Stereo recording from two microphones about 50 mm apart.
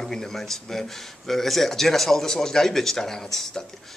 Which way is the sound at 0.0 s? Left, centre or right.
Centre.